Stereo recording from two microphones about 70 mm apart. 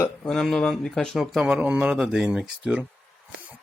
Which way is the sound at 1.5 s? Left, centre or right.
Right.